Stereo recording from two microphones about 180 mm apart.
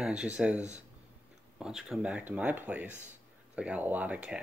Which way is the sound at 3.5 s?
5° right (ahead or behind).